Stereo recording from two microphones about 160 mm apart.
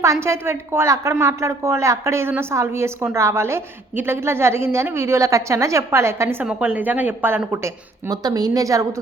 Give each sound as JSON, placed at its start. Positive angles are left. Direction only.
{"t": 0.0, "sound": "a woman's voice", "side_deg": -20}